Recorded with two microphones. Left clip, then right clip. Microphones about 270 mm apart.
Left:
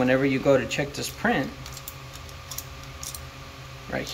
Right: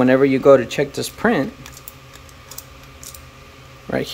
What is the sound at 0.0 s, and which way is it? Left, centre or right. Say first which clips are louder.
Speech: right 8 dB; centre.